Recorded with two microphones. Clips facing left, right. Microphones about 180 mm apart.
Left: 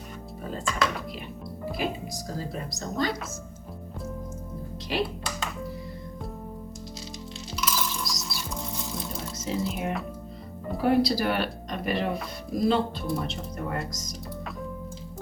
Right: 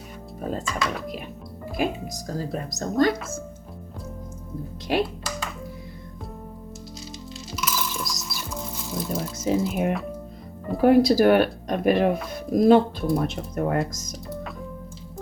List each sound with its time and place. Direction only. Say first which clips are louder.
0.6 s speech: even; centre (ahead or behind)
1.7 s speech: right 5 dB; 50° right (ahead or behind)
4.9 s speech: right 5 dB; 50° right (ahead or behind)
7.5 s music: right 1 dB; 5° right (ahead or behind)
9.4 s speech: right 6 dB; 55° right (ahead or behind)